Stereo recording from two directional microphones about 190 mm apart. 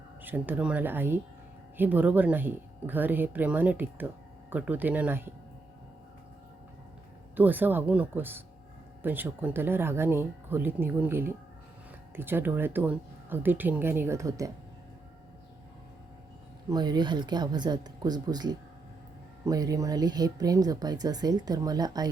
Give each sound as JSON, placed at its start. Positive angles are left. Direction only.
{"t": 0.2, "sound": "speech", "side_deg": -10}
{"t": 7.3, "sound": "speech", "side_deg": -10}
{"t": 16.6, "sound": "speech", "side_deg": -20}